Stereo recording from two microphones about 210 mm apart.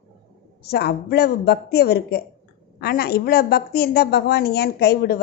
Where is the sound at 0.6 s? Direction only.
50° left (ahead or behind).